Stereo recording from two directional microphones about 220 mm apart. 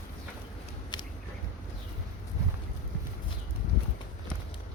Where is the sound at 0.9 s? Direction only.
20° left (ahead or behind).